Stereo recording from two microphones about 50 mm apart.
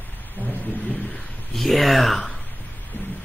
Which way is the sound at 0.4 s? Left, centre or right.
Left.